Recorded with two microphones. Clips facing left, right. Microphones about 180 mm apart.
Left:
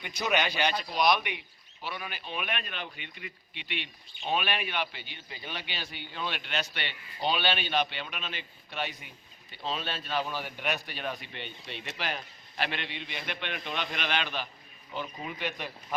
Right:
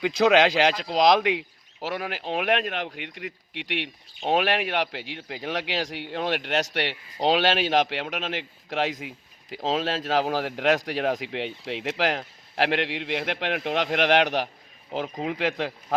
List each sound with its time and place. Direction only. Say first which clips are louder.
0.0 s a man's voice: right 11 dB; 90° right
4.3 s a man's voice: right 8 dB; 90° right